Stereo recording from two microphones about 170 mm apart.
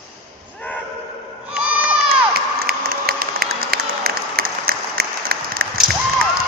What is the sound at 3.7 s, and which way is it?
Applause, 65° right (ahead or behind).